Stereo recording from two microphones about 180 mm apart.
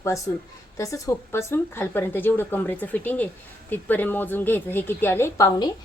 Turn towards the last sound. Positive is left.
turn(degrees=20)  # may be behind; listen again after turning